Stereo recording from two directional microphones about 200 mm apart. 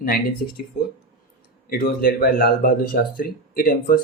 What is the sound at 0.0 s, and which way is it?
Speech, 45° left (ahead or behind).